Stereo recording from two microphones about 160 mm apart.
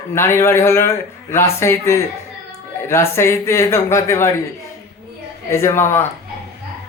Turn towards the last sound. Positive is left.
turn(degrees=15)  # may be behind; listen again after turning